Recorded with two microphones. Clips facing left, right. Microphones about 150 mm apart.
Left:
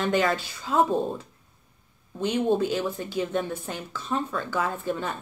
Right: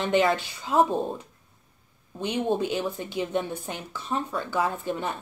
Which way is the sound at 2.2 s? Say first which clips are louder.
Left 2 dB; 15° right (ahead or behind).